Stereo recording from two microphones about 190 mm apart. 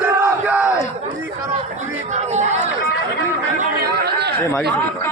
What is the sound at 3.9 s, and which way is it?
Chatter, 60° right (ahead or behind).